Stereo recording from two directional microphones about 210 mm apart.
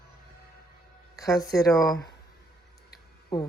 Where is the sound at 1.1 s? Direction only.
15° left (ahead or behind).